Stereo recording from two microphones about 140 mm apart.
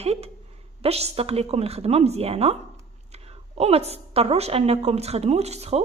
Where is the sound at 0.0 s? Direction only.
50° right (ahead or behind).